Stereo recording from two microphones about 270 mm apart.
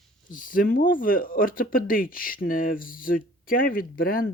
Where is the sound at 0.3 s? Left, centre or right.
Left.